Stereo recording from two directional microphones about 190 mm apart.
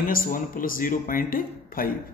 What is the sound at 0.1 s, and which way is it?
Speech, 45° left (ahead or behind).